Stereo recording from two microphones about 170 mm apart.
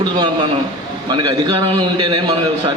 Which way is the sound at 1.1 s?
25° right (ahead or behind).